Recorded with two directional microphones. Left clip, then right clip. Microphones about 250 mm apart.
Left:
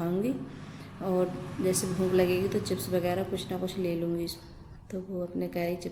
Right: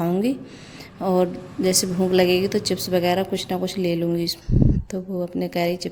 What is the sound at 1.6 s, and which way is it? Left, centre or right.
A woman's voice, right.